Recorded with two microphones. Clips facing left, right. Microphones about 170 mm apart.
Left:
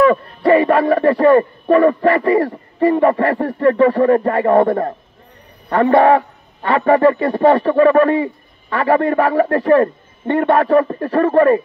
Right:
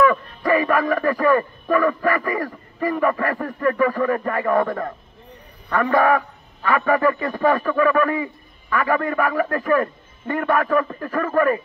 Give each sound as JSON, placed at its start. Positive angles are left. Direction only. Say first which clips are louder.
{"t": 0.0, "sound": "a man's voice", "louder": "left 5 dB", "side_deg": 30}